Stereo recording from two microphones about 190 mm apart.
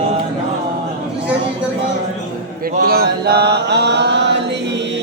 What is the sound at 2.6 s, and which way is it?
Chant, 50° right (ahead or behind).